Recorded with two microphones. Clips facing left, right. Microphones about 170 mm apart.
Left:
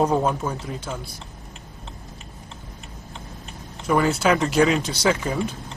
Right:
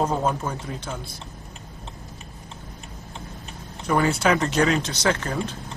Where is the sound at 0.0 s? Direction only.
10° left (ahead or behind).